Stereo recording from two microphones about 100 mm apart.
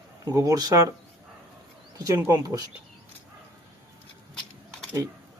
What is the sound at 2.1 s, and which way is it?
Speech, 25° right (ahead or behind).